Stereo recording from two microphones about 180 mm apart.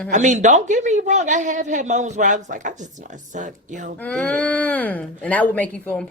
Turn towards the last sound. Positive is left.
turn(degrees=10)  # may be behind; listen again after turning